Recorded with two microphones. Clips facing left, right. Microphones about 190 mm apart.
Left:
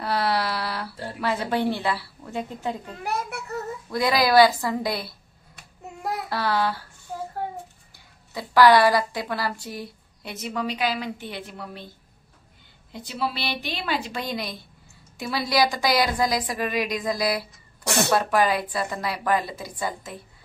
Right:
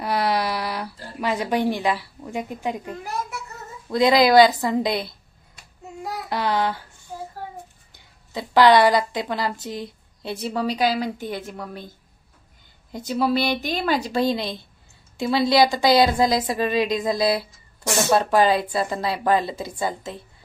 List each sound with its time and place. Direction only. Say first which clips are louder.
0.0 s a sound: right 2 dB; 15° right (ahead or behind)
1.2 s a woman's voice: right 2 dB; 15° right (ahead or behind)
3.0 s a child's voice: left 1 dB; 65° left (ahead or behind)
3.9 s a woman's voice: right 4 dB; 25° right (ahead or behind)
5.6 s child singing: even; 60° left (ahead or behind)
6.2 s a woman's voice: right 3 dB; 20° right (ahead or behind)
7.9 s a woman's voice: right 4 dB; 20° right (ahead or behind)
10.3 s a woman's voice: right 4 dB; 35° right (ahead or behind)
12.9 s a woman's voice: right 8 dB; 45° right (ahead or behind); by 20.2 s 25° right (ahead or behind)